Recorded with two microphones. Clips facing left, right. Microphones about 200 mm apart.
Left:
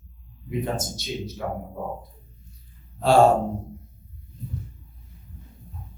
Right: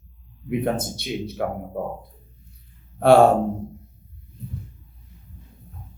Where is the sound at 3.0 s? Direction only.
60° right (ahead or behind).